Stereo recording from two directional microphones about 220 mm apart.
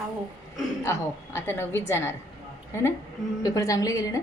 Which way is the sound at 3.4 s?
15° left (ahead or behind).